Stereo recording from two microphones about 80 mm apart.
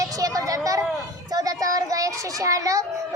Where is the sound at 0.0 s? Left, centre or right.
Right.